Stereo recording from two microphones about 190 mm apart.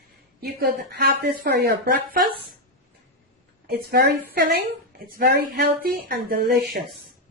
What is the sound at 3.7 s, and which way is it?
A woman's voice, 50° right (ahead or behind).